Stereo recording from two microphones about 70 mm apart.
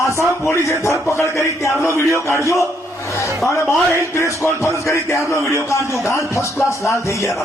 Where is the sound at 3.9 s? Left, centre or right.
Left.